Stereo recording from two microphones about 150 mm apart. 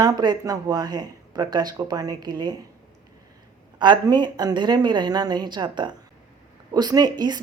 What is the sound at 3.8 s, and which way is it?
Speech, 30° right (ahead or behind).